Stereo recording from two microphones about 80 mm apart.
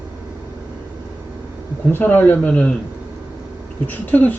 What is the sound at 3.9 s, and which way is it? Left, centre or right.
Speech, left.